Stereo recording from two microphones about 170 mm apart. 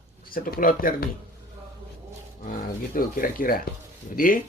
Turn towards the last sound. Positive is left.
turn(degrees=55)  # may be behind; listen again after turning